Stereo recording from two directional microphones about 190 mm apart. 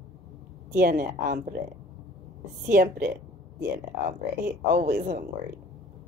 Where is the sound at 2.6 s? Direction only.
50° right (ahead or behind).